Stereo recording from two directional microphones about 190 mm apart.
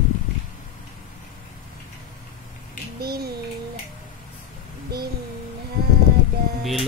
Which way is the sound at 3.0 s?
55° right (ahead or behind).